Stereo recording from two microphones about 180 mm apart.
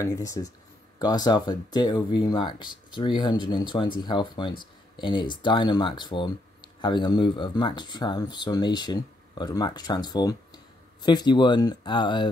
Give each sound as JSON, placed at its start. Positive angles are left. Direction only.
{"t": 0.0, "sound": "speech", "side_deg": 20}